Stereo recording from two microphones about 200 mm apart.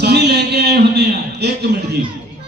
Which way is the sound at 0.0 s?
55° right (ahead or behind).